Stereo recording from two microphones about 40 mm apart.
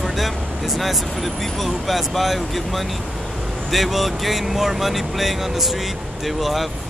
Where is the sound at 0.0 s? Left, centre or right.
Centre.